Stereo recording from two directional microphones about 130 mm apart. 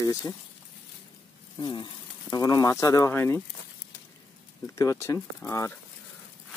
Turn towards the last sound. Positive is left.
turn(degrees=25)  # may be behind; listen again after turning